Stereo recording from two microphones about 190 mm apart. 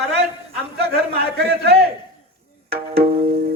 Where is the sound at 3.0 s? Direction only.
35° right (ahead or behind).